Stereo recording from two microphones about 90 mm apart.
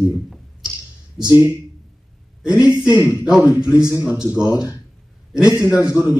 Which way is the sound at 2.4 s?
10° right (ahead or behind).